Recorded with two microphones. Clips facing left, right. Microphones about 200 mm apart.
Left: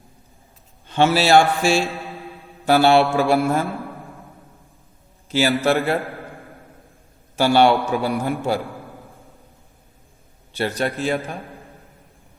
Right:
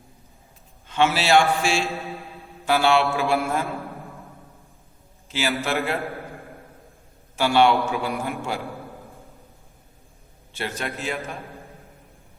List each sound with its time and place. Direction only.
0.9 s a man's voice: 35° left (ahead or behind)
5.3 s a man's voice: 40° left (ahead or behind)
7.3 s a man's voice: 40° left (ahead or behind)
10.5 s a man's voice: 35° left (ahead or behind)